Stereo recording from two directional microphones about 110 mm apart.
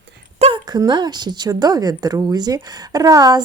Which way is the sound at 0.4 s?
85° right.